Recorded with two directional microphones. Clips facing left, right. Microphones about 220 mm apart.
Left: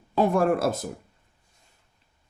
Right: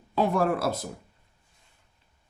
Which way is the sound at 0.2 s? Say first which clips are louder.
Left 3 dB; 50° left (ahead or behind).